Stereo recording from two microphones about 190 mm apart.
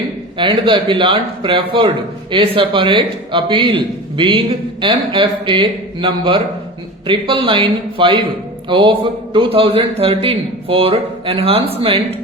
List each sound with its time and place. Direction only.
0.3 s a man's voice: 25° right (ahead or behind)